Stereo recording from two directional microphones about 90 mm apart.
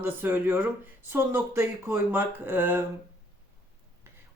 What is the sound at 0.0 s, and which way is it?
Speech, 25° right (ahead or behind).